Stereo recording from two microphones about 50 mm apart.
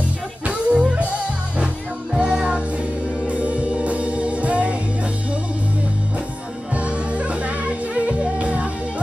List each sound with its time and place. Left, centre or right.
0.5 s music: right
2.1 s music: centre
6.7 s music: right